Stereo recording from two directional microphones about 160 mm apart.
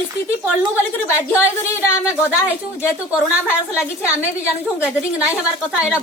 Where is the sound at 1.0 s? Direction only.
15° left (ahead or behind).